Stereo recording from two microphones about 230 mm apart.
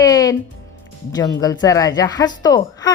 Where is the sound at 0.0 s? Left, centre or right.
Centre.